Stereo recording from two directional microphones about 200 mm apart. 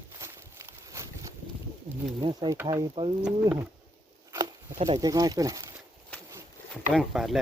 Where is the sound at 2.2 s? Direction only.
25° right (ahead or behind).